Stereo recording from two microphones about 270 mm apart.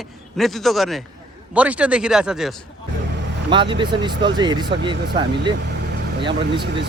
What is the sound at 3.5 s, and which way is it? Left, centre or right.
Speech, centre.